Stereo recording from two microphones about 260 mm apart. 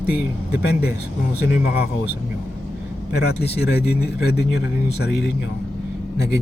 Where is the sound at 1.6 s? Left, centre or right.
Left.